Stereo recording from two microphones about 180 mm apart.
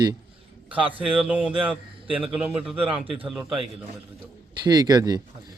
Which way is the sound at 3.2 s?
Centre (ahead or behind).